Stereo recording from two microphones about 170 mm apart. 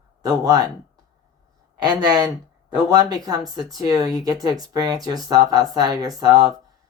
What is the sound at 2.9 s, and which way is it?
Speech, 20° right (ahead or behind).